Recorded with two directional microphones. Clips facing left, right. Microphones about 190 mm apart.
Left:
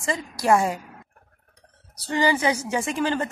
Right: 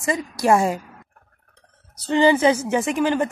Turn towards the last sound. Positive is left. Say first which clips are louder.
# right 4 dB
turn(degrees=-20)  # may be behind; listen again after turning